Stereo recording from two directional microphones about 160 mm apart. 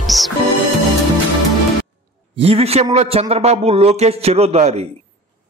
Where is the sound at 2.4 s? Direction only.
40° right (ahead or behind).